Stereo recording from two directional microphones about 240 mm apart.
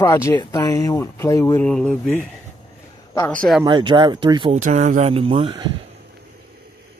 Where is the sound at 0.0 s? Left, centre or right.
Centre.